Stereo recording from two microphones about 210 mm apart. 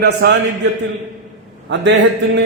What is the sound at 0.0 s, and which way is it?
Speech, 50° right (ahead or behind).